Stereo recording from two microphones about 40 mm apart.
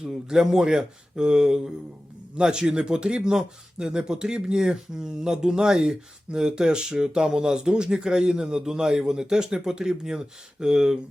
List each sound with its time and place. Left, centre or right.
0.0 s speech: centre